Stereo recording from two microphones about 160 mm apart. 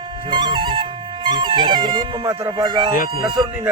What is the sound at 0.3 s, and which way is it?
Music, 30° right (ahead or behind).